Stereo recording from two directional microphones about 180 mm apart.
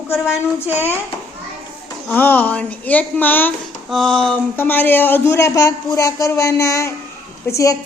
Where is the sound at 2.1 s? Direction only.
10° left (ahead or behind).